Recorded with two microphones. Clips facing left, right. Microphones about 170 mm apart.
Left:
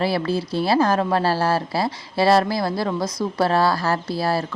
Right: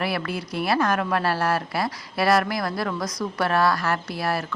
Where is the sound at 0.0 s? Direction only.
30° left (ahead or behind).